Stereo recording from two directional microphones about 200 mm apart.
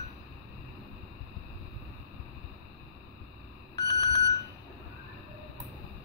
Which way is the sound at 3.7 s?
15° left (ahead or behind).